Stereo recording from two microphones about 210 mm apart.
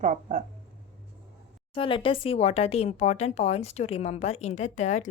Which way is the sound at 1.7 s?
25° left (ahead or behind).